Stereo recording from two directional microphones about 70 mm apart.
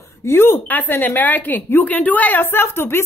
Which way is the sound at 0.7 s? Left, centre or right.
Left.